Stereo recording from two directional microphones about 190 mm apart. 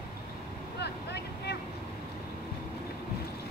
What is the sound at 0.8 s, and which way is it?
Vehicle, 60° left (ahead or behind).